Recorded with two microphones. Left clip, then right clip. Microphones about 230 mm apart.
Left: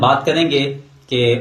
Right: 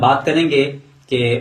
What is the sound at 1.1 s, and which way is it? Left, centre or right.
Speech, centre.